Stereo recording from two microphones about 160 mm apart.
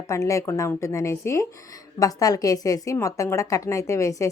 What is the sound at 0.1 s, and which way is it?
A woman's voice, 20° left (ahead or behind).